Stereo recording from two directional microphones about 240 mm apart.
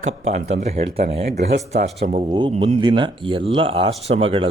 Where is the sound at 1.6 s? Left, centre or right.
Right.